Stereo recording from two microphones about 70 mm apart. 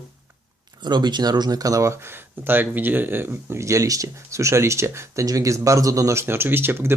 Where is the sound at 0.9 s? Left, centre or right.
Right.